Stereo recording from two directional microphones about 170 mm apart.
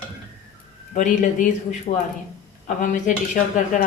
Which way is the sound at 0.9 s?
50° left (ahead or behind).